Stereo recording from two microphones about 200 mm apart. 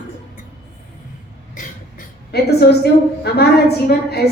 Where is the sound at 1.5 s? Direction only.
40° left (ahead or behind).